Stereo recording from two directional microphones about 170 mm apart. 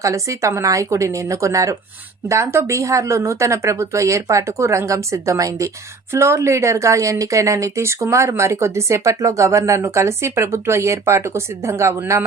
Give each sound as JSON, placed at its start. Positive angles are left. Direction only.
{"t": 0.0, "sound": "speech", "side_deg": -20}